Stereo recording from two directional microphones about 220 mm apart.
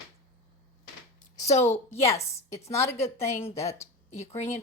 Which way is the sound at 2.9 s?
30° left (ahead or behind).